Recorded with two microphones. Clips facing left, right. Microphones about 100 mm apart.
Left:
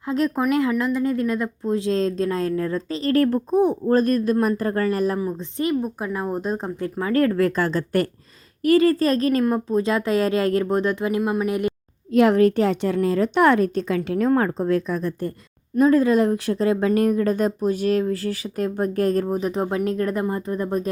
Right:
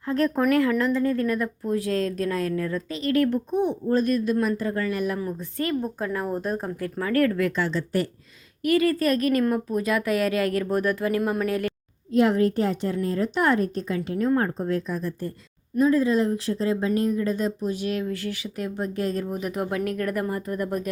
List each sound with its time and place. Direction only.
0.0 s a woman's voice: 15° left (ahead or behind); by 5.2 s 35° left (ahead or behind)
5.2 s a woman's voice: 20° left (ahead or behind); by 8.1 s 50° left (ahead or behind)
8.6 s a woman's voice: 30° left (ahead or behind)
12.1 s a woman's voice: 80° left; by 19.4 s 45° left (ahead or behind)
19.4 s a woman's voice: 30° left (ahead or behind)